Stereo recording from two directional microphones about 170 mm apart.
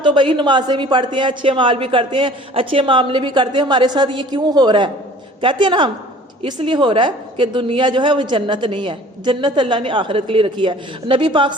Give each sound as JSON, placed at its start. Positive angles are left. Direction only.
{"t": 0.0, "sound": "a woman's voice", "side_deg": -30}